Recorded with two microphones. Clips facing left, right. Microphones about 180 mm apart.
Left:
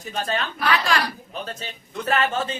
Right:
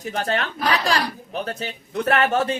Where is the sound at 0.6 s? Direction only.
40° right (ahead or behind).